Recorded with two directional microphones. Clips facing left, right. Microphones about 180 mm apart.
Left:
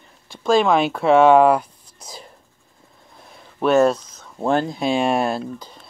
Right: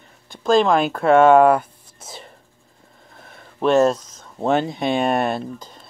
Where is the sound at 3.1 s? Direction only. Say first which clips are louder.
Even; centre (ahead or behind).